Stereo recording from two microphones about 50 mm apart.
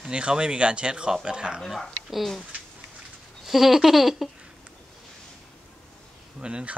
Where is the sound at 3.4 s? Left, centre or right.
Centre.